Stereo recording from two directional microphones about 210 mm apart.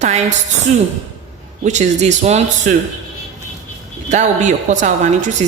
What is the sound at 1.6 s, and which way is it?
A woman's voice, 35° right (ahead or behind).